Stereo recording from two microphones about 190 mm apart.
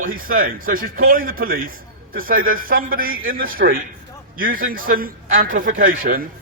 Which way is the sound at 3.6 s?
55° right (ahead or behind).